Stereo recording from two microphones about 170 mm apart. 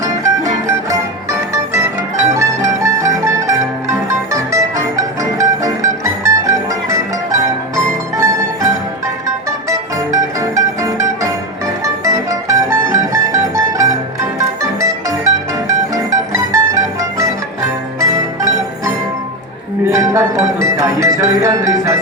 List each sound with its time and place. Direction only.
0.0 s music: 20° right (ahead or behind)
8.1 s mandolin: 20° right (ahead or behind)
9.2 s music: 20° right (ahead or behind)
19.9 s music: 20° right (ahead or behind)